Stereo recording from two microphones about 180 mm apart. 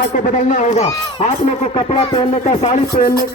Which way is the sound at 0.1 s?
45° left (ahead or behind).